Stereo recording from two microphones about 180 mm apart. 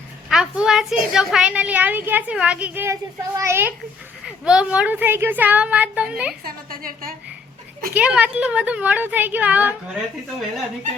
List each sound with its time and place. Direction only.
0.3 s a woman's voice: 5° right (ahead or behind)
6.4 s a woman's voice: 55° right (ahead or behind)
7.9 s a woman's voice: 5° right (ahead or behind)